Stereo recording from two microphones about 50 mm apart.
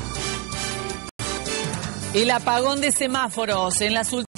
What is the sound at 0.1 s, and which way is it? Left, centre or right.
Music, right.